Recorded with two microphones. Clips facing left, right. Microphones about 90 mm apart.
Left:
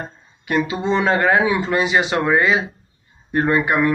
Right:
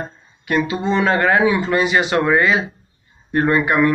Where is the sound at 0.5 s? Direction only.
20° left (ahead or behind).